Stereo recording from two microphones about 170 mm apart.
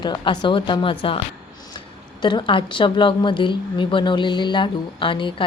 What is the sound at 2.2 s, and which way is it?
A woman's voice, 30° left (ahead or behind).